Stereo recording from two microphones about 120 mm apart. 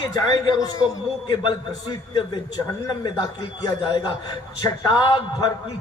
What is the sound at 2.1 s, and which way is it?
A man's voice, 35° left (ahead or behind).